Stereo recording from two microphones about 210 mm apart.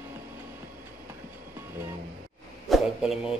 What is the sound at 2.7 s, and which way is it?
Speech, centre (ahead or behind).